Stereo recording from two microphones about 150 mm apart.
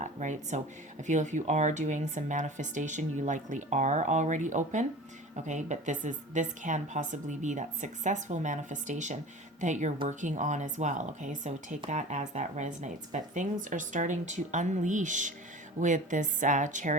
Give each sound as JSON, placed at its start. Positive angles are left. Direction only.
{"t": 0.0, "sound": "a woman's voice", "side_deg": -55}